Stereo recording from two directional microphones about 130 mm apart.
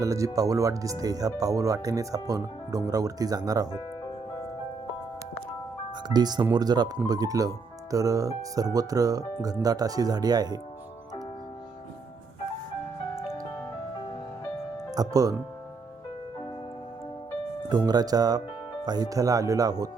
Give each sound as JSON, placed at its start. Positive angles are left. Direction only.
{"t": 0.0, "sound": "speech", "side_deg": -25}
{"t": 6.1, "sound": "speech", "side_deg": -35}
{"t": 14.8, "sound": "speech", "side_deg": -30}
{"t": 17.7, "sound": "speech", "side_deg": -30}